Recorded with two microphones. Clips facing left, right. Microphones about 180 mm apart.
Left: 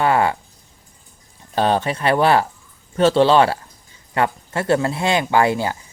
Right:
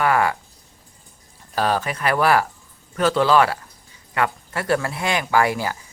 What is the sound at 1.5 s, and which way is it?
Speech, 25° left (ahead or behind).